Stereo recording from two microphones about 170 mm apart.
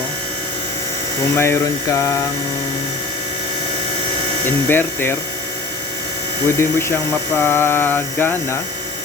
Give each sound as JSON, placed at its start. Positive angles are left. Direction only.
{"t": 1.4, "sound": "speech", "side_deg": 15}
{"t": 4.4, "sound": "speech", "side_deg": 10}
{"t": 6.6, "sound": "speech", "side_deg": 15}